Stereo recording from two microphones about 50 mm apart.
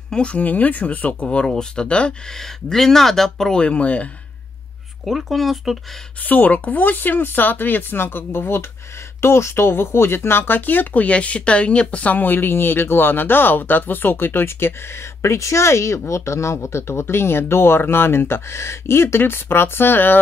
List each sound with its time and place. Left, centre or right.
0.1 s speech: left
2.3 s speech: centre
3.6 s speech: left
5.0 s speech: centre
6.2 s speech: left